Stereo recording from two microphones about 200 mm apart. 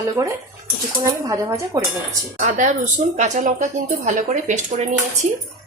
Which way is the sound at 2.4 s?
35° right (ahead or behind).